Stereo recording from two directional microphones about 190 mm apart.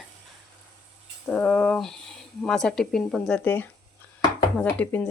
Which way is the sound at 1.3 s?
10° left (ahead or behind).